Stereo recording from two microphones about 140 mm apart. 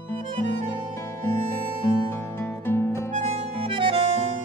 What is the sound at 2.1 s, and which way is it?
Music, 15° left (ahead or behind).